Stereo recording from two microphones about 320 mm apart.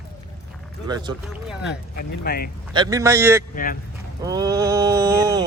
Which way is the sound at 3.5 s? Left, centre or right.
Left.